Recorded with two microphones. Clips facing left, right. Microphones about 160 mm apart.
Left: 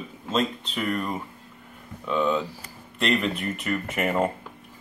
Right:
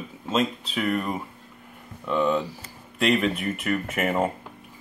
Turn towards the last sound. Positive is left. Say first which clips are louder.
# even
turn(degrees=-5)  # may be behind; listen again after turning